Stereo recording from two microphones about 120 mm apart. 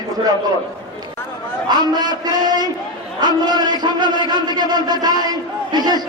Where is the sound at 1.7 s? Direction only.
35° right (ahead or behind).